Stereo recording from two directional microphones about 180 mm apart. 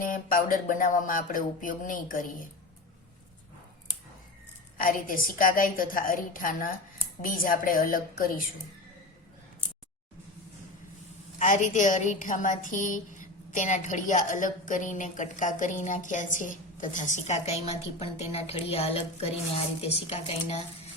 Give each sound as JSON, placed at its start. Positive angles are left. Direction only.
{"t": 0.0, "sound": "a woman's voice", "side_deg": 50}
{"t": 4.8, "sound": "a woman's voice", "side_deg": 50}
{"t": 11.3, "sound": "a woman's voice", "side_deg": 45}